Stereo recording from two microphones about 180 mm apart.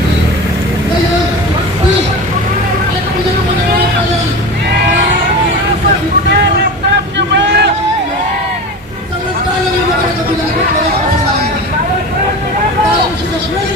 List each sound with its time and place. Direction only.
7.2 s vehicle: 70° right (ahead or behind)